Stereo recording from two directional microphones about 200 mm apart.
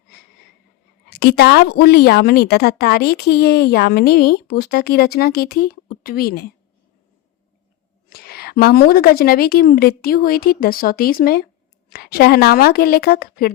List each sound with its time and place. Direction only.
1.1 s a woman's voice: 55° left (ahead or behind)
8.1 s a woman's voice: 50° left (ahead or behind)